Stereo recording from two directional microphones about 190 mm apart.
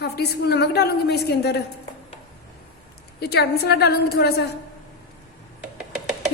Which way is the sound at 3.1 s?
60° left (ahead or behind).